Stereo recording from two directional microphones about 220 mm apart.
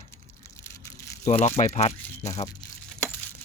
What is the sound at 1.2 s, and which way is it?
Speech, 30° left (ahead or behind).